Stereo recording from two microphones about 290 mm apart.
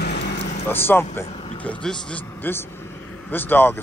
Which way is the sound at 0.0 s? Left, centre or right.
Left.